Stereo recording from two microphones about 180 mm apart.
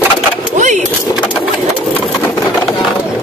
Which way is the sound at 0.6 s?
45° right (ahead or behind).